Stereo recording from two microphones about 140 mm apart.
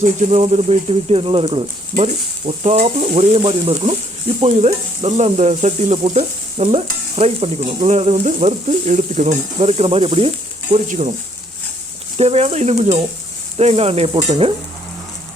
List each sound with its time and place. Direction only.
0.0 s stir: 55° right (ahead or behind); by 1.6 s 35° right (ahead or behind)
2.6 s stir: 50° right (ahead or behind)
10.8 s speech: 55° right (ahead or behind)
12.1 s stir: 50° right (ahead or behind)